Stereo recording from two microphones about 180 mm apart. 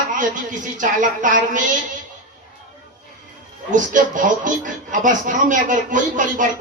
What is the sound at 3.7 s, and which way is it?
Speech, 45° right (ahead or behind).